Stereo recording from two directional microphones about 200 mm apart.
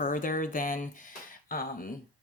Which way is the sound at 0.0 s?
40° left (ahead or behind).